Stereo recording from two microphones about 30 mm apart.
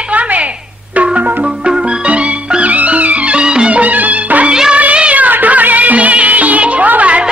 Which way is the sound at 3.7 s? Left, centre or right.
Right.